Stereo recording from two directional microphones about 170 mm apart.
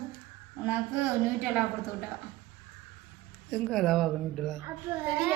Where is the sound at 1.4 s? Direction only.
10° right (ahead or behind).